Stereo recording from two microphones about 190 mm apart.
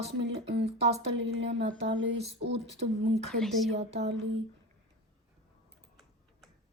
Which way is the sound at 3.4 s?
Centre (ahead or behind).